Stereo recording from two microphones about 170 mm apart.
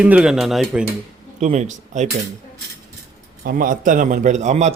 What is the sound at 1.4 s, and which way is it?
Speech, 45° right (ahead or behind).